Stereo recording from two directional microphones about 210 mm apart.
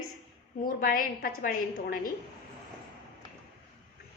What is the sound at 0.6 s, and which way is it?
A woman's voice, 40° left (ahead or behind).